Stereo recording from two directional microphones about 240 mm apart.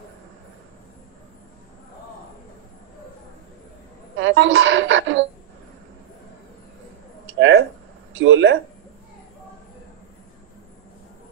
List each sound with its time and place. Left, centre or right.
4.2 s speech: right
7.3 s a sound: right
8.1 s speech: right